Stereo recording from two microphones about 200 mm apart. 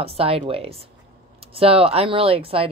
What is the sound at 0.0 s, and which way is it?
A woman's voice, 30° right (ahead or behind).